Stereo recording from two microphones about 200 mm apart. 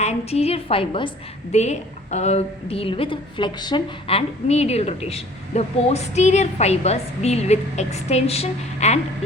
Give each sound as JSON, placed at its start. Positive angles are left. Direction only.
{"t": 0.0, "sound": "a woman's voice", "side_deg": 30}